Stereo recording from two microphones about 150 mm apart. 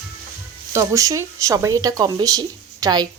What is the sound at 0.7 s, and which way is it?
Speech, 20° right (ahead or behind).